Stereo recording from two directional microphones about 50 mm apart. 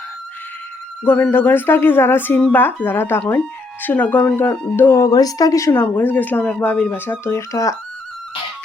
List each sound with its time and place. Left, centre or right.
1.3 s speech: left
4.9 s speech: left
5.7 s speech: left
6.9 s speech: left
7.3 s speech: left